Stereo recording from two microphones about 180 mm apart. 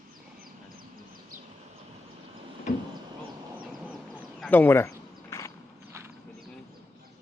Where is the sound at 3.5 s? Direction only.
10° right (ahead or behind).